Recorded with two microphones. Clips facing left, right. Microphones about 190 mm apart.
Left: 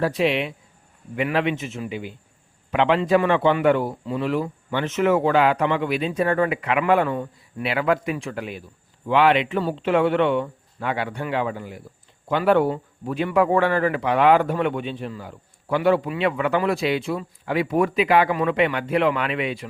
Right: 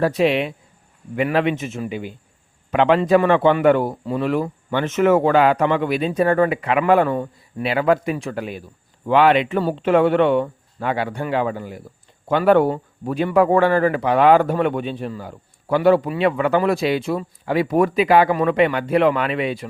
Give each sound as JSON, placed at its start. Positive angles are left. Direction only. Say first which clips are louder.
{"t": 0.0, "sound": "a man's voice", "louder": "right 4 dB", "side_deg": -45}